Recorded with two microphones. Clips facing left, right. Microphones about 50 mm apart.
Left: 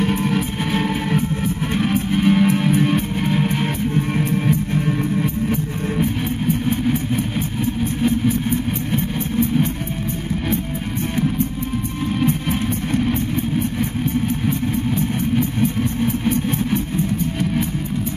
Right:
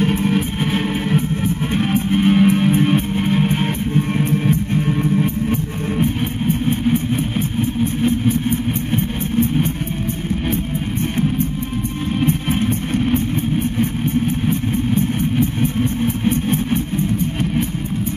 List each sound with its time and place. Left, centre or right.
0.2 s music: centre
16.3 s vehicle: right